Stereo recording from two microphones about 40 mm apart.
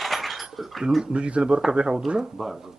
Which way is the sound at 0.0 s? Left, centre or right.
Centre.